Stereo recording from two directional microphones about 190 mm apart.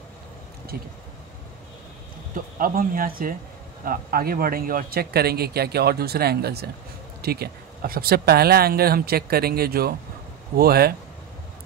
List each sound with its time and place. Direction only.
2.3 s speech: 45° right (ahead or behind)